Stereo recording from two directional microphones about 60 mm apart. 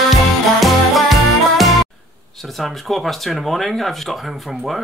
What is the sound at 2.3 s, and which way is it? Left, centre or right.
Speech, centre.